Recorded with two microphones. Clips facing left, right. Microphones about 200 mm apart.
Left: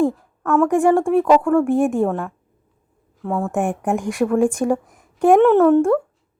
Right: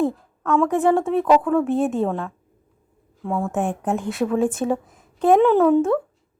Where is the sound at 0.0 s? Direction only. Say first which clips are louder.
Left 3 dB; 10° left (ahead or behind).